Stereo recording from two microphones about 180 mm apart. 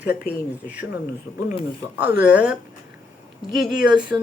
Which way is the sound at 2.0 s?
10° right (ahead or behind).